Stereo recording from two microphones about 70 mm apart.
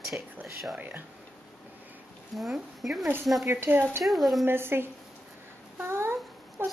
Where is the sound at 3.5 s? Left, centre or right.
Right.